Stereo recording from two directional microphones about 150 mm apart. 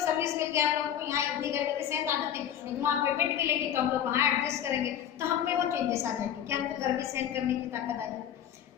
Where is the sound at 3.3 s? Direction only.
15° right (ahead or behind).